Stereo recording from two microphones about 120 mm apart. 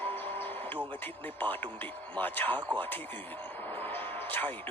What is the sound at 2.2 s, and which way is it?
Speech, 15° left (ahead or behind).